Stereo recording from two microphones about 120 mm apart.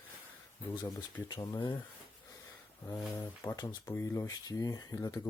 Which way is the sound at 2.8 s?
30° left (ahead or behind).